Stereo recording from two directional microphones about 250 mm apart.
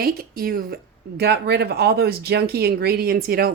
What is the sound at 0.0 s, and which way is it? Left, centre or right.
Speech, right.